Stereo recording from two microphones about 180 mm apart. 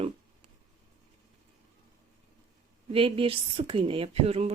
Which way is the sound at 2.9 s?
30° right (ahead or behind).